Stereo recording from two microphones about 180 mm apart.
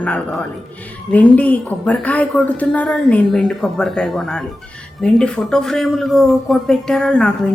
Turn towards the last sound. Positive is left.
turn(degrees=5)  # may be behind; listen again after turning